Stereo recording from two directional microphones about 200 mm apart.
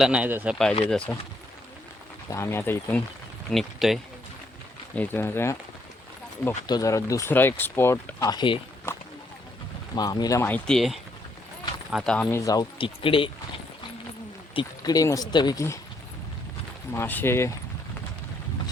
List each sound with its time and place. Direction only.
0.0 s speech: 5° right (ahead or behind)
0.9 s speech: 5° left (ahead or behind)
2.3 s speech: 15° left (ahead or behind)
3.5 s speech: centre (ahead or behind)
4.9 s speech: 10° left (ahead or behind)
6.7 s speech: 20° left (ahead or behind)
9.9 s speech: 20° left (ahead or behind)
12.5 s speech: 25° left (ahead or behind)
14.5 s speech: 20° left (ahead or behind)
16.9 s speech: 10° left (ahead or behind)